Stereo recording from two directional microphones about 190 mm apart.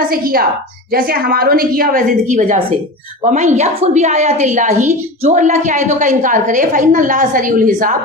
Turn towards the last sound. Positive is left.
turn(degrees=-45)  # may be behind; listen again after turning